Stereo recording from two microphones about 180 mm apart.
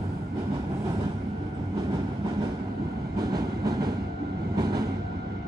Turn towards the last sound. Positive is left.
turn(degrees=-20)  # may be behind; listen again after turning